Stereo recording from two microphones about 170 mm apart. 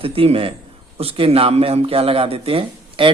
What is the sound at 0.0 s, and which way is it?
Speech, 35° right (ahead or behind).